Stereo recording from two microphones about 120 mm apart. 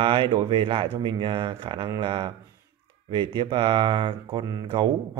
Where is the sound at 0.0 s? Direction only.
45° right (ahead or behind).